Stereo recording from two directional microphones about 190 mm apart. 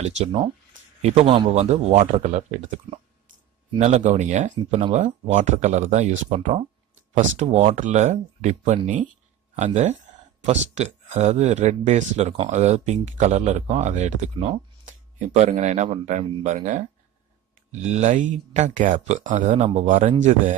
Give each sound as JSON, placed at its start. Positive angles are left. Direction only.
{"t": 0.0, "sound": "speech", "side_deg": -30}